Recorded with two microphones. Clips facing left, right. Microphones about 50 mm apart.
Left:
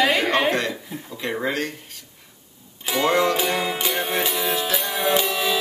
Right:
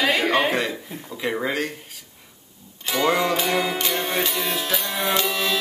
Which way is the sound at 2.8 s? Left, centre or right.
Centre.